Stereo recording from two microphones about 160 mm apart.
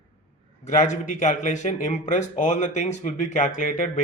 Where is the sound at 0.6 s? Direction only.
50° left (ahead or behind).